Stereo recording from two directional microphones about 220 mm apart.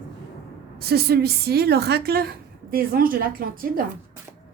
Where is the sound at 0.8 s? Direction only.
45° right (ahead or behind).